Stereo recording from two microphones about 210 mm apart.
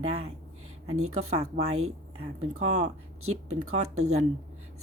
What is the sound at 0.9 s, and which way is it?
Speech, 90° right.